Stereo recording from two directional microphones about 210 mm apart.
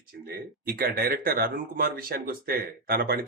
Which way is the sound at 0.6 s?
45° right (ahead or behind).